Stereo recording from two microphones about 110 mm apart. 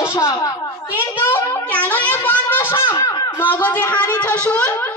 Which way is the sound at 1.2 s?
15° left (ahead or behind).